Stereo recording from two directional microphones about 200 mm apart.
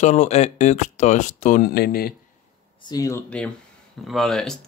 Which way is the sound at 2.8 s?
20° left (ahead or behind).